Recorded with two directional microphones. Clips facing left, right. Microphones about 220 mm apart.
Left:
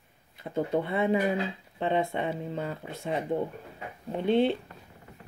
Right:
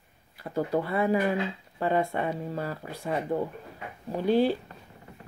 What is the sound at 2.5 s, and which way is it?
Speech, 20° left (ahead or behind).